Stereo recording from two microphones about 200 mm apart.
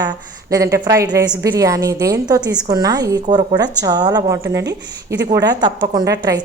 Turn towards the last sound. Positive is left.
turn(degrees=-15)  # may be behind; listen again after turning